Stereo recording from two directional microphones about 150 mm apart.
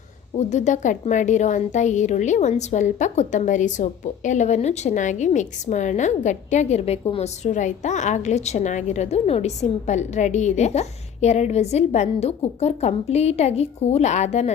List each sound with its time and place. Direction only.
0.3 s a woman's voice: 50° left (ahead or behind)